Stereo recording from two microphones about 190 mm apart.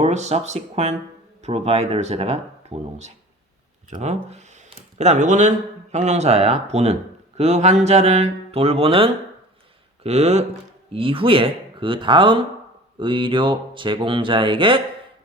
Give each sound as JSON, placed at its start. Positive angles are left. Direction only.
{"t": 0.0, "sound": "speech", "side_deg": -35}